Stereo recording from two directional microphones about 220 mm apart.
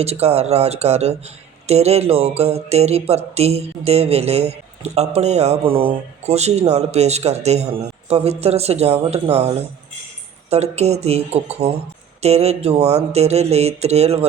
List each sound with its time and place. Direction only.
0.0 s speech: 30° right (ahead or behind)
10.5 s speech: 30° right (ahead or behind)